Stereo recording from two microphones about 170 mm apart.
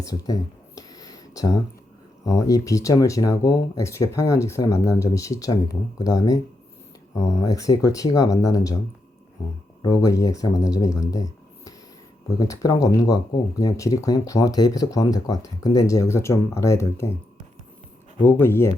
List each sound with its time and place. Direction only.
0.0 s speech: 20° left (ahead or behind)
0.8 s a sound: 20° left (ahead or behind)
2.2 s speech: 20° left (ahead or behind)
9.8 s speech: 20° left (ahead or behind)
18.3 s speech: 15° left (ahead or behind)